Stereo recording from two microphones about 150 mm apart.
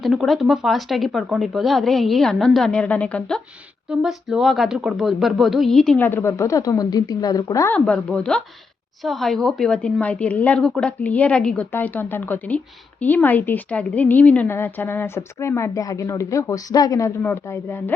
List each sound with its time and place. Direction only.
0.0 s speech: centre (ahead or behind)
6.1 s a woman's voice: 15° left (ahead or behind)
7.7 s a woman's voice: 5° left (ahead or behind)